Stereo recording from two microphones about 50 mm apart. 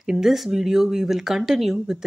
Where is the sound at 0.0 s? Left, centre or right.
Centre.